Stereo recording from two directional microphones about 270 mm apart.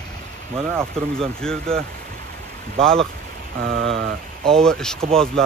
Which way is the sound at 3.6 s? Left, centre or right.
Right.